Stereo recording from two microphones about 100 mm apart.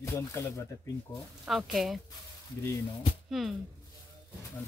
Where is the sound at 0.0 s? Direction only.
30° left (ahead or behind).